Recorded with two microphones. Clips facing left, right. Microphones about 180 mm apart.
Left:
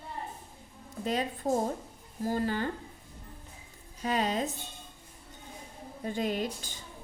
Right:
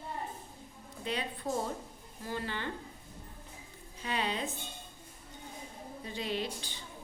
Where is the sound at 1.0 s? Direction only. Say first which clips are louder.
Left 5 dB; 40° left (ahead or behind).